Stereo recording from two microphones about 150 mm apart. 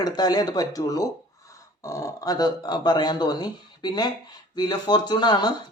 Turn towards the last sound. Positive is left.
turn(degrees=30)  # may be behind; listen again after turning